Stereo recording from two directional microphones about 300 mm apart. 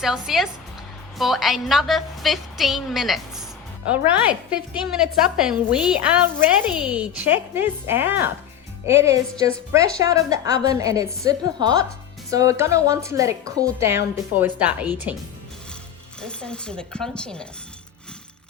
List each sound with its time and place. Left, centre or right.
0.0 s speech: centre
16.2 s speech: centre